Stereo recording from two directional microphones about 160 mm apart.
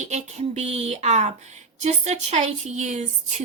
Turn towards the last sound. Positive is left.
turn(degrees=-45)  # may be behind; listen again after turning